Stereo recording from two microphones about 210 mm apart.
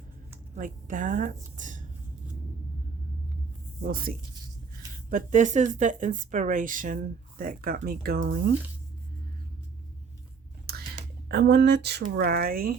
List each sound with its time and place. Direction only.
0.5 s speech: 40° right (ahead or behind)
3.8 s speech: 45° right (ahead or behind)
11.3 s speech: 50° right (ahead or behind)